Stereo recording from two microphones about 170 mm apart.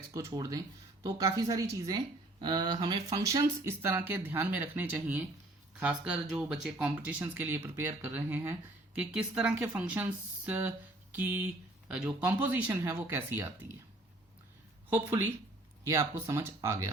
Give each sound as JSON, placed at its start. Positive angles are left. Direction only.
{"t": 0.1, "sound": "a woman's voice", "side_deg": -15}
{"t": 14.9, "sound": "speech", "side_deg": -10}